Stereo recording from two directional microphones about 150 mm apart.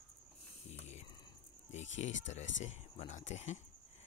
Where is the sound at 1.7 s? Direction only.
50° left (ahead or behind).